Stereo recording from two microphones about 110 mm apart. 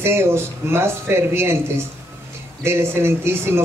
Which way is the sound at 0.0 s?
20° right (ahead or behind).